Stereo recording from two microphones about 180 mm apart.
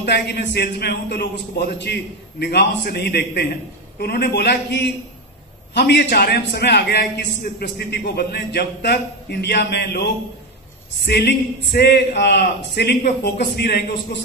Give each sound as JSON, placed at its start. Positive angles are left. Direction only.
{"t": 0.0, "sound": "a man's voice", "side_deg": 65}